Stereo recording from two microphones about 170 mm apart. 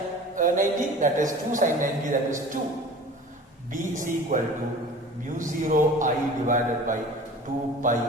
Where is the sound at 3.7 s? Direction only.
50° right (ahead or behind).